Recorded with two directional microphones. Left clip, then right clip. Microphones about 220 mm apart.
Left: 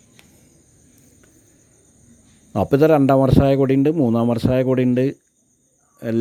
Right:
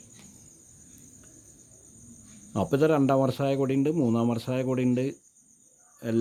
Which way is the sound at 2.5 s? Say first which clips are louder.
Left 9 dB; 30° left (ahead or behind).